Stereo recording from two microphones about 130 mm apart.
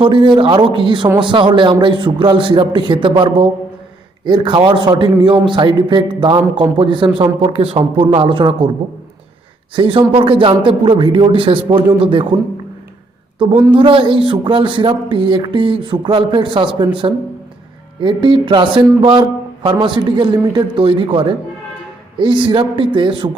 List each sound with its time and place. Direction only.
0.0 s a man's voice: 40° right (ahead or behind)
9.7 s a man's voice: 40° right (ahead or behind)
13.7 s speech: 40° right (ahead or behind)